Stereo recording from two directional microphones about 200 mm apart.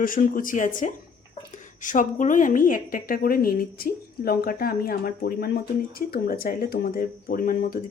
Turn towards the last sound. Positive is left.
turn(degrees=45)  # may be behind; listen again after turning